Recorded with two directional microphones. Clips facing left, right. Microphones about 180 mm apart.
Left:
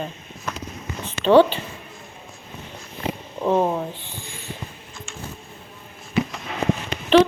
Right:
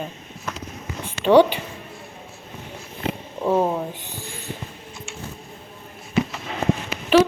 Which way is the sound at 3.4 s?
5° right (ahead or behind).